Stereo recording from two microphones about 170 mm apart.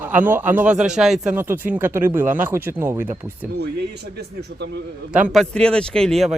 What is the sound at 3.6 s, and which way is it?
Speech, 75° right (ahead or behind).